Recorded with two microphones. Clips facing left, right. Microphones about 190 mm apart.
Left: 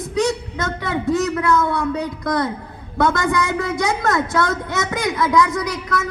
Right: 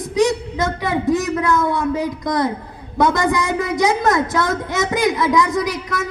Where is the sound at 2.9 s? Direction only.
20° right (ahead or behind).